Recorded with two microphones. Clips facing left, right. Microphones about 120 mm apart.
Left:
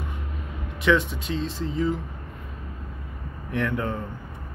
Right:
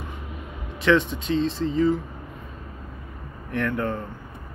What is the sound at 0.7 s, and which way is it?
Speech, 10° left (ahead or behind).